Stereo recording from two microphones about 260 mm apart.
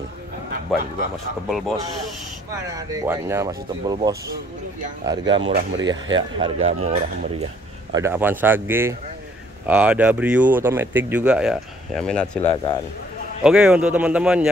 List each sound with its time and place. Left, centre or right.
0.7 s speech: centre
2.9 s speech: centre
5.4 s speech: right
5.9 s speech: centre
7.9 s speech: centre